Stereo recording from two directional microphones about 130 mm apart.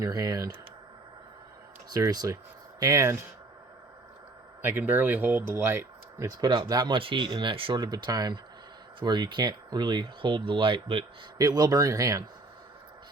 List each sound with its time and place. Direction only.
0.0 s a man's voice: 30° right (ahead or behind)
1.9 s a man's voice: 30° right (ahead or behind)
4.6 s speech: 15° right (ahead or behind)
6.4 s speech: 35° right (ahead or behind)
11.3 s a man's voice: 30° right (ahead or behind)